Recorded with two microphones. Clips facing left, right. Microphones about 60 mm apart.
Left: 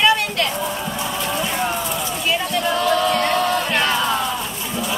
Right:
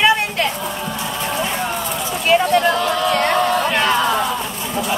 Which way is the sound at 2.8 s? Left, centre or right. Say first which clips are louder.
Even; centre.